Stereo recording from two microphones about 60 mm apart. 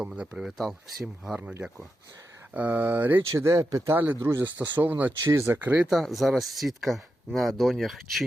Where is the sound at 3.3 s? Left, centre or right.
Right.